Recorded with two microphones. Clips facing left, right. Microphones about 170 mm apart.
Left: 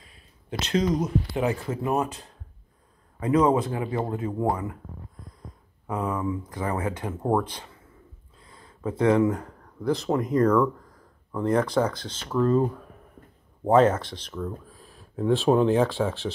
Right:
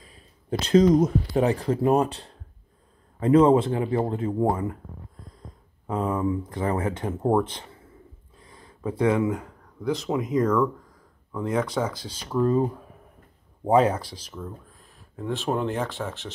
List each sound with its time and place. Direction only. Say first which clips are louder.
0.5 s speech: right 7 dB; 45° right (ahead or behind); by 4.5 s 25° right (ahead or behind)
5.9 s speech: right 3 dB; 25° right (ahead or behind); by 14.5 s 5° right (ahead or behind)
15.1 s speech: left 6 dB; 5° left (ahead or behind)